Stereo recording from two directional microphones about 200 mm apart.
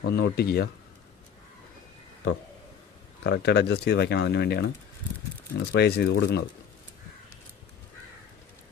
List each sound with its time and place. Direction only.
0.0 s speech: 55° left (ahead or behind)
3.3 s speech: 55° left (ahead or behind)